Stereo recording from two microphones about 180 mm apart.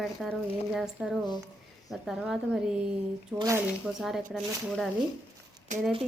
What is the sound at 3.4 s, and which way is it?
Speech, 15° right (ahead or behind).